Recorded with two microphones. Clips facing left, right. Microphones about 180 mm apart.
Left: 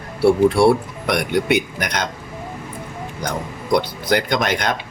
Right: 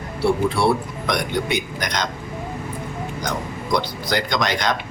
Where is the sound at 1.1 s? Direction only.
60° left (ahead or behind).